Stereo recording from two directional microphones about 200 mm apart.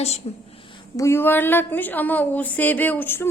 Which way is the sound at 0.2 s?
30° left (ahead or behind).